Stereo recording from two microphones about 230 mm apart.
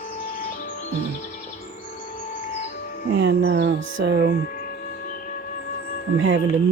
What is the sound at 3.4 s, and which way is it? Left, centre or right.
Music, right.